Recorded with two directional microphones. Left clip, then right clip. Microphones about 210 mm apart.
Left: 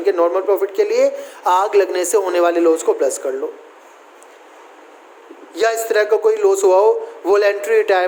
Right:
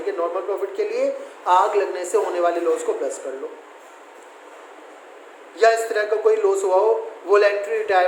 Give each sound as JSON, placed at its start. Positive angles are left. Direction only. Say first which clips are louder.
{"t": 0.0, "sound": "a man's voice", "louder": "left 8 dB", "side_deg": 50}
{"t": 5.5, "sound": "a man's voice", "louder": "left 1 dB", "side_deg": 50}